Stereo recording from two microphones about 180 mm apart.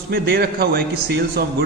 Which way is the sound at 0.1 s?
60° right (ahead or behind).